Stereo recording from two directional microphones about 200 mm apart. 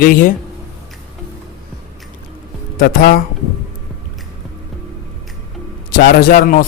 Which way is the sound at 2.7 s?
45° left (ahead or behind).